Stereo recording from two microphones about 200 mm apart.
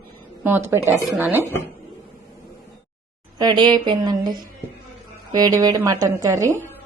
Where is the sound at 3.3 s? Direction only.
20° right (ahead or behind).